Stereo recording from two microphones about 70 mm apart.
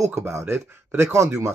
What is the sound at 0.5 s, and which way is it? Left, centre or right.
Speech, right.